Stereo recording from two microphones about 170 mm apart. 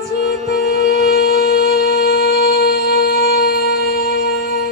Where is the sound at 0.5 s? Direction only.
70° left (ahead or behind).